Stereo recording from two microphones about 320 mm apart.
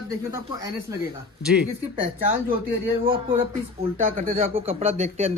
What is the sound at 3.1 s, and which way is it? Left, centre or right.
A man's voice, centre.